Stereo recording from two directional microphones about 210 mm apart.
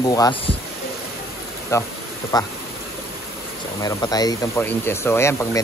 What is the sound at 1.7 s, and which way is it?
Speech, 15° left (ahead or behind).